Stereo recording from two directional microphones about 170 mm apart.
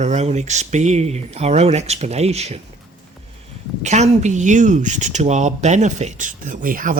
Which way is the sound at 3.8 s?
45° right (ahead or behind).